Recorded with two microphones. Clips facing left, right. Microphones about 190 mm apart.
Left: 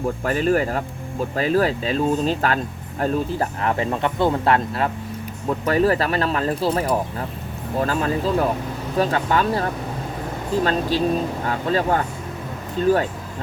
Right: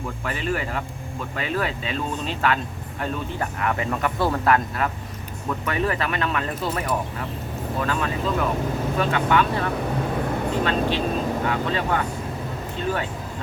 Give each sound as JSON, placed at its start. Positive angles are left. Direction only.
{"t": 0.0, "sound": "speech", "side_deg": 40}